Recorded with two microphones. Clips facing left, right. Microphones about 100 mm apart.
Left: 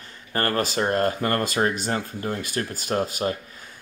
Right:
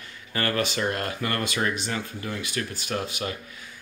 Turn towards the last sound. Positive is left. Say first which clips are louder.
# left 5 dB
turn(degrees=40)  # may be behind; listen again after turning